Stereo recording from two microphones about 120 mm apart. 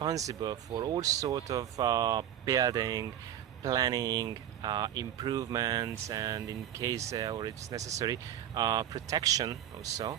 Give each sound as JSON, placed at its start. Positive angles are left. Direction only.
{"t": 0.0, "sound": "speech", "side_deg": -30}